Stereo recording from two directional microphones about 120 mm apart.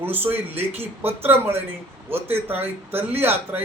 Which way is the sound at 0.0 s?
15° right (ahead or behind).